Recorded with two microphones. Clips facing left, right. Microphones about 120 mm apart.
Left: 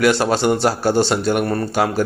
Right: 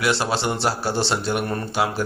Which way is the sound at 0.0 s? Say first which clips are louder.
Left 6 dB; 50° left (ahead or behind).